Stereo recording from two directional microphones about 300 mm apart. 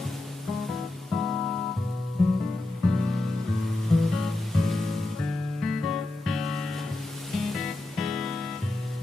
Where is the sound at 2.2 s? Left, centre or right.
Centre.